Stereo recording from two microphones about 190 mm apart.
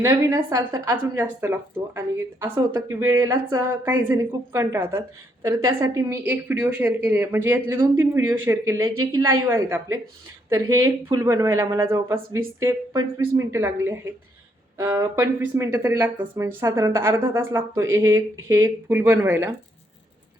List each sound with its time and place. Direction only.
0.0 s a woman's voice: 15° right (ahead or behind)